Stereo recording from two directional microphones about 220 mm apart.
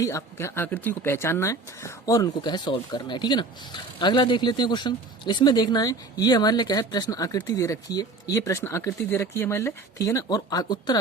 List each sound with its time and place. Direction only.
0.0 s speech: 15° left (ahead or behind)